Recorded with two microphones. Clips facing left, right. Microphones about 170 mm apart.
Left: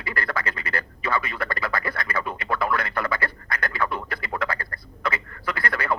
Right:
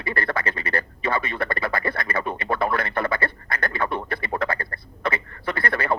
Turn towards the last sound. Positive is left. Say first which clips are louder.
# right 2 dB
turn(degrees=-25)  # may be behind; listen again after turning